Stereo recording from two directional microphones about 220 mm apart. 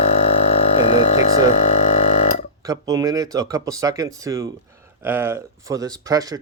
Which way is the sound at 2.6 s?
15° right (ahead or behind).